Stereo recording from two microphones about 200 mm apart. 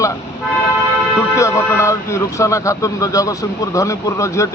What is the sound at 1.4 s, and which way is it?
Speech, 15° left (ahead or behind).